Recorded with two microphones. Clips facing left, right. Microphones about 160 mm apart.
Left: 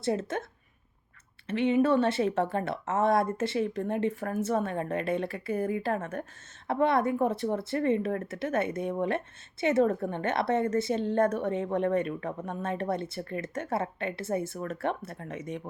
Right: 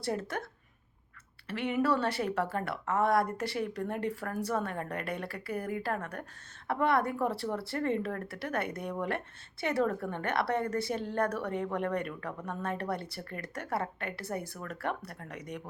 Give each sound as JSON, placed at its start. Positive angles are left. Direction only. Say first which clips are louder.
{"t": 0.0, "sound": "speech", "louder": "left 4 dB", "side_deg": 20}
{"t": 1.5, "sound": "speech", "louder": "left 5 dB", "side_deg": 20}